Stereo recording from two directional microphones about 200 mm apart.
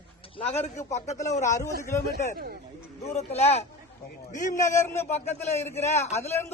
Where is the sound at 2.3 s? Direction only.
50° right (ahead or behind).